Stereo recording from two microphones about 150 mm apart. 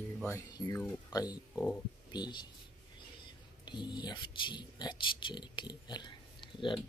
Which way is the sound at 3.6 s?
30° left (ahead or behind).